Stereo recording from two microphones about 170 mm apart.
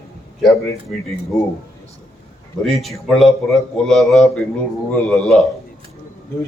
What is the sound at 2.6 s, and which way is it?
A man's voice, centre (ahead or behind).